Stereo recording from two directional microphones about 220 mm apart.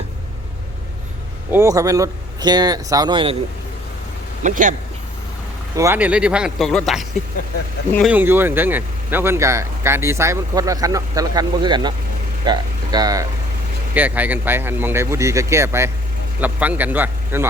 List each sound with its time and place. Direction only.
1.5 s speech: 15° right (ahead or behind)
4.4 s speech: 35° right (ahead or behind)
5.7 s speech: 10° right (ahead or behind)